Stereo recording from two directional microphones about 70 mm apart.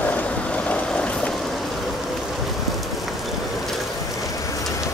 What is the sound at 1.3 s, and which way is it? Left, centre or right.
Vehicle, centre.